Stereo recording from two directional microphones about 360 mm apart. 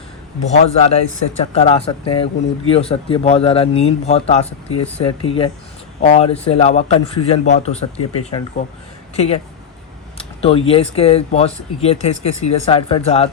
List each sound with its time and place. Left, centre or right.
0.5 s speech: centre